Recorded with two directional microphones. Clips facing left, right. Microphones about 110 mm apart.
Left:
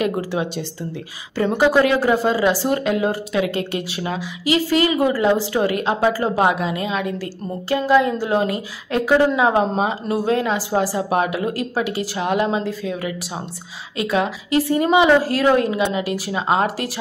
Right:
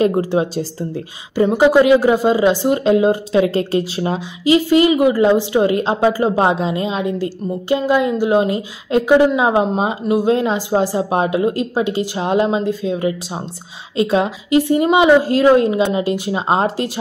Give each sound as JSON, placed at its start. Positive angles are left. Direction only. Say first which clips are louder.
{"t": 0.3, "sound": "speech", "louder": "right 6 dB", "side_deg": -35}
{"t": 1.6, "sound": "a woman's voice", "louder": "right 5 dB", "side_deg": -20}